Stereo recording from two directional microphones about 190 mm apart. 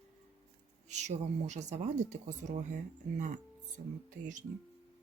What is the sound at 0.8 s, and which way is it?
Speech, 40° right (ahead or behind).